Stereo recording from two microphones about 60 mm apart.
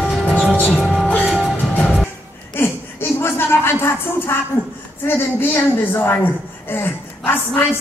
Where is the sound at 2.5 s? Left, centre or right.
Left.